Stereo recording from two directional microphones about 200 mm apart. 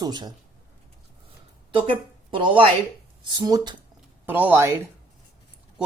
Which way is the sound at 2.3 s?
25° right (ahead or behind).